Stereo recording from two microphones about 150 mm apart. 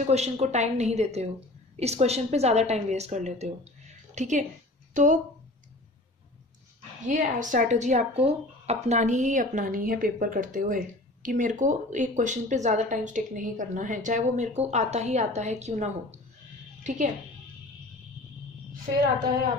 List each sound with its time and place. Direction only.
0.0 s a woman's voice: 50° right (ahead or behind)
7.1 s speech: 55° right (ahead or behind)